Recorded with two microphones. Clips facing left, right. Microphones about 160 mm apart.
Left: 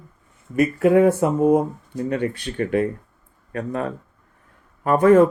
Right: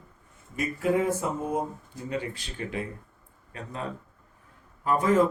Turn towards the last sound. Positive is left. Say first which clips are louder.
# left 9 dB
turn(degrees=60)  # may be behind; listen again after turning